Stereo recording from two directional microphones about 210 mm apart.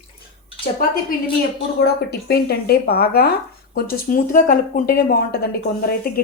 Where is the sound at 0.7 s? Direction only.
40° left (ahead or behind).